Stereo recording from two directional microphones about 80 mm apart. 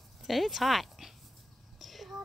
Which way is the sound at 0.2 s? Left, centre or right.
Centre.